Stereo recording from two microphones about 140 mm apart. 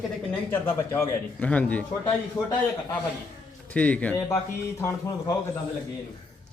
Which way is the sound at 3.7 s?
10° left (ahead or behind).